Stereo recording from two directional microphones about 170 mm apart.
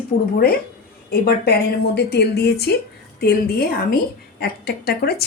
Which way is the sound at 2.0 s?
75° left (ahead or behind).